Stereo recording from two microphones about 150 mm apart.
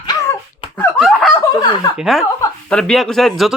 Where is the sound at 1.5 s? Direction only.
25° left (ahead or behind).